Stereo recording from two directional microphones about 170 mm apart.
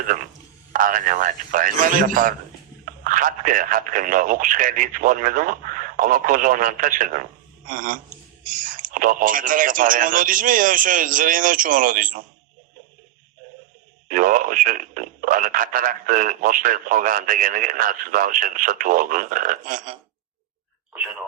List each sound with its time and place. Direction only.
0.7 s speech: 55° right (ahead or behind)
14.1 s speech: 55° right (ahead or behind)